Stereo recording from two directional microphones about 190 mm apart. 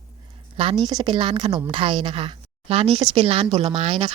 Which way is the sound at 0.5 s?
30° right (ahead or behind).